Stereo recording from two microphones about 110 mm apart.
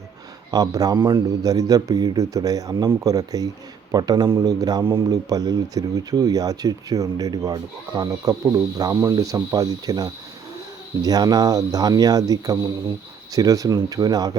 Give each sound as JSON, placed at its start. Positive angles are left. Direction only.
{"t": 0.5, "sound": "speech", "side_deg": -35}